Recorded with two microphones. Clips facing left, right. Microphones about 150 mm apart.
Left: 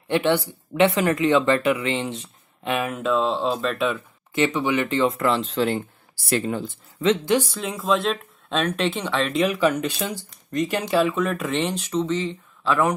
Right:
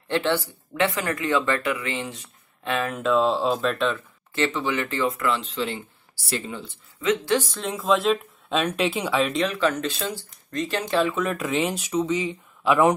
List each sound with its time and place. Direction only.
0.1 s speech: 15° left (ahead or behind)
3.0 s speech: centre (ahead or behind); by 6.8 s 50° left (ahead or behind)
7.5 s speech: centre (ahead or behind)
9.3 s speech: 10° left (ahead or behind); by 12.9 s 15° right (ahead or behind)